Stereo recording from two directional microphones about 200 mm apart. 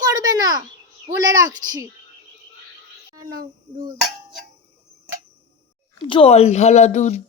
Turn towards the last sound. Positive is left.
turn(degrees=35)  # may be behind; listen again after turning